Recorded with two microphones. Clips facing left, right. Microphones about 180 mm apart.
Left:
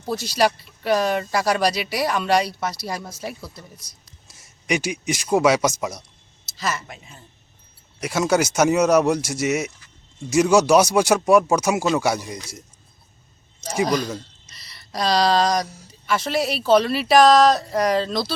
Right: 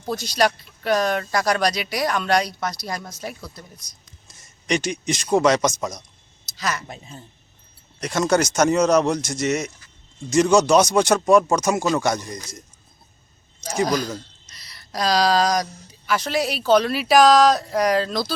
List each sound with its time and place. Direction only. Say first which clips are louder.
0.0 s speech: even; 5° left (ahead or behind)
6.8 s a woman's voice: right 4 dB; 35° right (ahead or behind)
8.0 s speech: even; 5° left (ahead or behind)
13.7 s speech: even; centre (ahead or behind)